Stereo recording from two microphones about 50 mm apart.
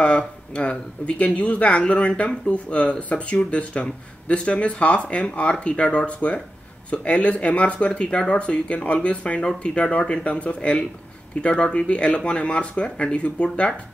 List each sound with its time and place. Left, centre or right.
0.0 s speech: left